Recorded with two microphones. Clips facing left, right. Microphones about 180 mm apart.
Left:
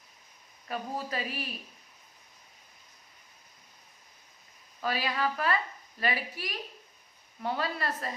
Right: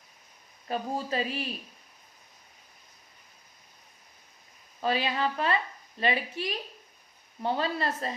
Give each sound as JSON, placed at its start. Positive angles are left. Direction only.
{"t": 0.7, "sound": "a woman's voice", "side_deg": -30}
{"t": 4.8, "sound": "a woman's voice", "side_deg": -25}